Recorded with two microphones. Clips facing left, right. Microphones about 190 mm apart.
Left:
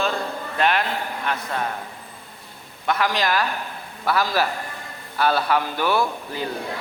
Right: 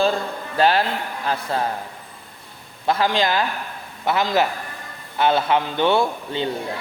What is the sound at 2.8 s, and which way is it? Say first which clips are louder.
A man's voice: right 3 dB; 30° right (ahead or behind).